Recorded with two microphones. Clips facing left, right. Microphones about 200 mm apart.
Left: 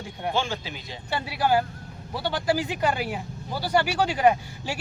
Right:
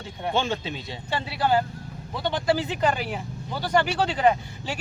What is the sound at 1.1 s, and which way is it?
Speech, 10° left (ahead or behind).